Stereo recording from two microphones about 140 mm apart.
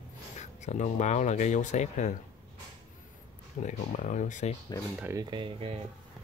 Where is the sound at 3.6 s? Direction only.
60° left (ahead or behind).